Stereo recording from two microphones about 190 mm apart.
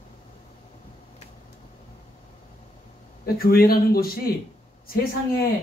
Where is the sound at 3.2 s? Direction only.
50° left (ahead or behind).